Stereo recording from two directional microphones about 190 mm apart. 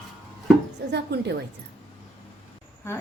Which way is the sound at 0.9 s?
60° right (ahead or behind).